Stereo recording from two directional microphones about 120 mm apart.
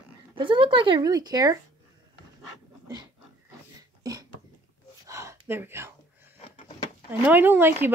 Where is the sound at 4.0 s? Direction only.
30° right (ahead or behind).